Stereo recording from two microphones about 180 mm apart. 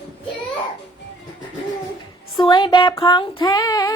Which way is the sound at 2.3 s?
25° left (ahead or behind).